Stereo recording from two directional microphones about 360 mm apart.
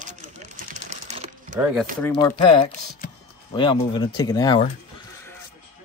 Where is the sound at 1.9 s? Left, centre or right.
Centre.